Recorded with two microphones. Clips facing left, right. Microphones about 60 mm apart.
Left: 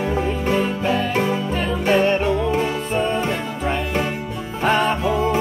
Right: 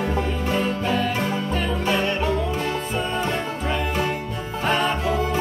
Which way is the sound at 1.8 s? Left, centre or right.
Left.